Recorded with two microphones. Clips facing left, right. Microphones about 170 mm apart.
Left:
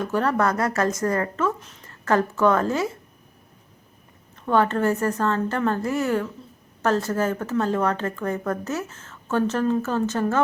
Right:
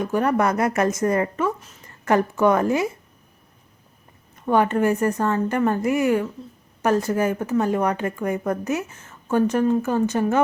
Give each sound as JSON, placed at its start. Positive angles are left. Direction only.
{"t": 0.0, "sound": "speech", "side_deg": -15}
{"t": 4.4, "sound": "speech", "side_deg": -15}